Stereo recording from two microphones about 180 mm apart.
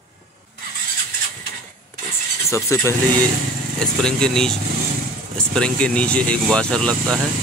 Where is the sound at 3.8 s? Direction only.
5° left (ahead or behind).